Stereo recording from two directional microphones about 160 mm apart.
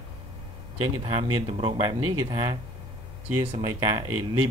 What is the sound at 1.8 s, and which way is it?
Speech, 25° right (ahead or behind).